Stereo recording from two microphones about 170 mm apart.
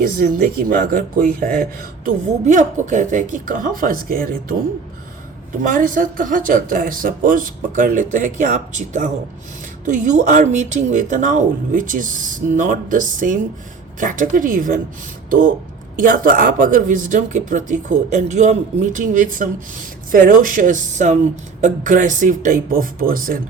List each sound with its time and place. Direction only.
0.0 s speech: 55° right (ahead or behind)
2.0 s speech: 45° right (ahead or behind)
5.6 s speech: 50° right (ahead or behind)